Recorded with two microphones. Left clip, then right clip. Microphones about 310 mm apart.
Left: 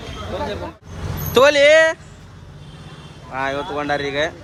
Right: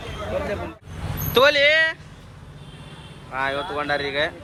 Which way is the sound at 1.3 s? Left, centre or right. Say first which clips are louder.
Left 5 dB; centre.